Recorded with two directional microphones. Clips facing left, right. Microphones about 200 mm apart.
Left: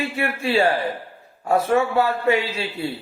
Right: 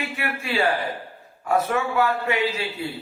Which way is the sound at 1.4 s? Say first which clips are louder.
Left 4 dB; 30° left (ahead or behind).